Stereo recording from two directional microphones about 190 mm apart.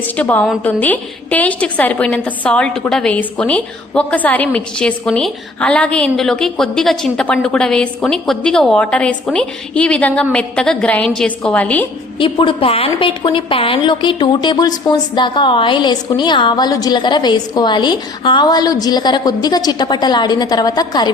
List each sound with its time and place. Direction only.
0.2 s a woman's voice: 5° left (ahead or behind)
12.2 s a woman's voice: 25° left (ahead or behind)